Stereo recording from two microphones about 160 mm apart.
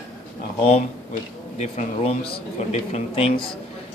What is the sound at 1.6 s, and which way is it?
Speech, 45° left (ahead or behind).